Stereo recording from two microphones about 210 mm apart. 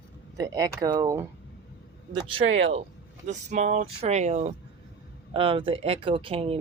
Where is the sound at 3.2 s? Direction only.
35° right (ahead or behind).